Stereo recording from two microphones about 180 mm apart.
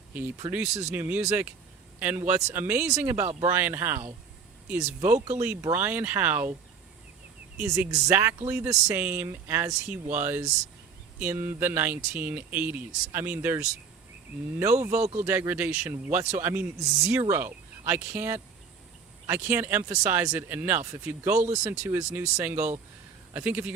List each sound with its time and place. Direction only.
0.1 s speech: 10° right (ahead or behind)
5.0 s speech: 40° right (ahead or behind)
5.7 s speech: 10° right (ahead or behind)
7.9 s speech: 15° right (ahead or behind)
14.8 s speech: 15° right (ahead or behind)
15.0 s speech: 40° right (ahead or behind)
15.3 s speech: 10° right (ahead or behind)